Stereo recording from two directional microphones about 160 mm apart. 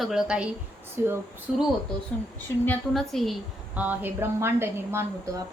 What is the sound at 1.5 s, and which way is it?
Speech, 5° right (ahead or behind).